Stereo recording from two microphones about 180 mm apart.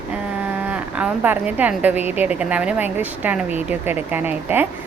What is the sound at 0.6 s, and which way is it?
A woman's voice, 10° right (ahead or behind).